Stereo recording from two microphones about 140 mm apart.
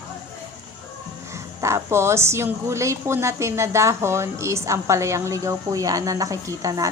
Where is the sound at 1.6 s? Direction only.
20° right (ahead or behind).